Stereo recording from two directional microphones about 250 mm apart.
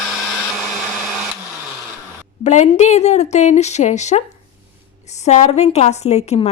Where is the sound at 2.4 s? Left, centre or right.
Left.